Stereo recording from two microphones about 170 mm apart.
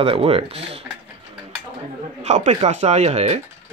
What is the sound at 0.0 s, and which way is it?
Speech, 35° right (ahead or behind).